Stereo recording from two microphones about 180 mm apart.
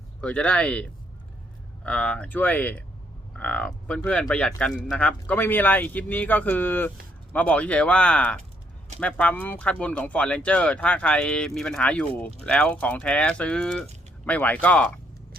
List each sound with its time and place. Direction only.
0.2 s speech: 5° left (ahead or behind)